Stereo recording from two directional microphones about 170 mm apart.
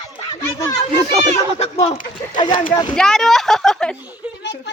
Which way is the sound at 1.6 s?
35° left (ahead or behind).